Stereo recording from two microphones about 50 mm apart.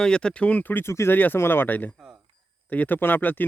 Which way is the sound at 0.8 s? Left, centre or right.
Left.